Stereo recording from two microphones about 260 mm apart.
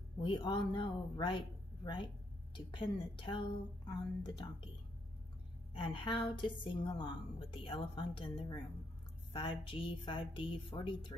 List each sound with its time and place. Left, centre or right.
0.2 s speech: centre
2.5 s speech: centre
5.8 s a woman's voice: centre